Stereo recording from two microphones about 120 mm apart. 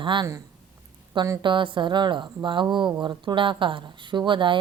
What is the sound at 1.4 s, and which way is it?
Speech, 45° right (ahead or behind).